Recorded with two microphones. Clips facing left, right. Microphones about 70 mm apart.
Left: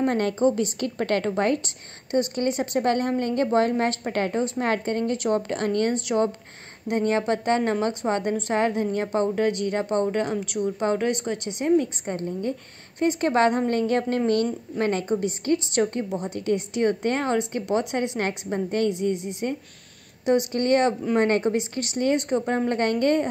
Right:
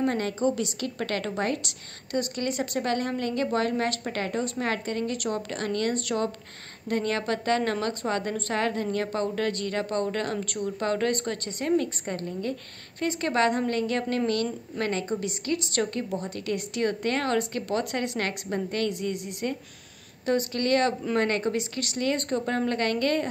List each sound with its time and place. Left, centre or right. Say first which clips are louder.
0.0 s a woman's voice: left 4 dB; left